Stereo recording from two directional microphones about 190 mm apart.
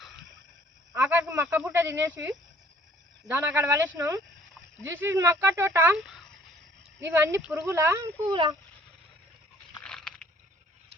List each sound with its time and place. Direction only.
0.9 s speech: 15° right (ahead or behind)
7.0 s speech: 10° right (ahead or behind)
9.8 s a sound: 5° left (ahead or behind)